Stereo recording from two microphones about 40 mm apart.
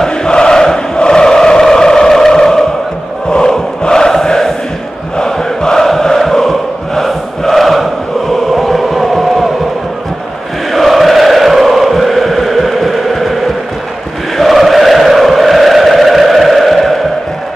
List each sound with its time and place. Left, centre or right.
0.0 s chant: centre
3.3 s a sound: centre
5.1 s mantra: centre
5.9 s a sound: centre
7.0 s chant: centre
10.7 s chant: centre